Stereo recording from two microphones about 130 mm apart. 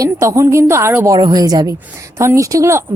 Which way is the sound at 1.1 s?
30° right (ahead or behind).